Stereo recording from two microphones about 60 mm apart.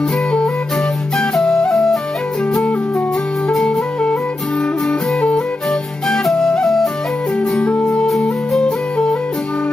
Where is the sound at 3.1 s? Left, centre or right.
Centre.